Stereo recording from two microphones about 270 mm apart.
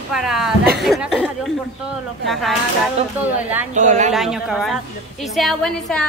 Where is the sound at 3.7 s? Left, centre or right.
Right.